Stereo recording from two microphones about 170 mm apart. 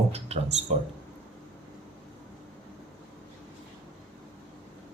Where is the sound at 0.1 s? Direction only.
40° right (ahead or behind).